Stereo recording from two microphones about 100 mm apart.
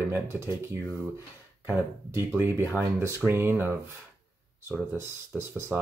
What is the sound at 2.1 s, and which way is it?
Speech, 25° right (ahead or behind).